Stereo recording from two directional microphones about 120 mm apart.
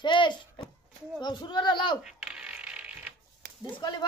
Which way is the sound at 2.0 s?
5° right (ahead or behind).